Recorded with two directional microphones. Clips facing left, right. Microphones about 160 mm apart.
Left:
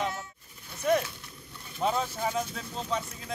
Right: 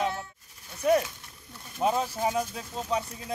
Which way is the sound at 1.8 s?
10° right (ahead or behind).